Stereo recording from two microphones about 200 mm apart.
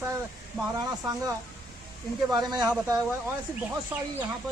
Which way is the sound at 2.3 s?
20° right (ahead or behind).